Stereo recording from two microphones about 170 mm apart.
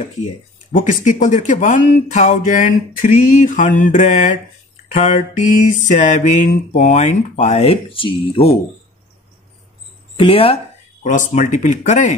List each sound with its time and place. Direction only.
0.7 s speech: 50° left (ahead or behind); by 8.5 s 30° left (ahead or behind)
10.1 s speech: 30° left (ahead or behind)
11.1 s speech: 45° left (ahead or behind)